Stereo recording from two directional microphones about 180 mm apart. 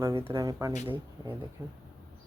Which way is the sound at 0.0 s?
15° right (ahead or behind).